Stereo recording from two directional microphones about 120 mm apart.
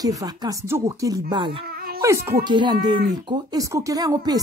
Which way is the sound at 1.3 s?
45° right (ahead or behind).